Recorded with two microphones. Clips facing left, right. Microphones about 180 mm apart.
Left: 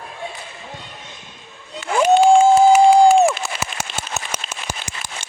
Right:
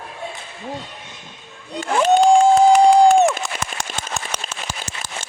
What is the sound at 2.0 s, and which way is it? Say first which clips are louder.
Crowd: left 1 dB; 5° left (ahead or behind).